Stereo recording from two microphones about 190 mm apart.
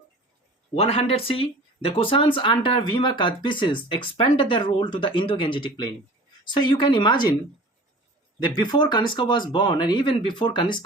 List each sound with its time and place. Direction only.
0.8 s speech: 35° left (ahead or behind)
8.4 s speech: 20° left (ahead or behind)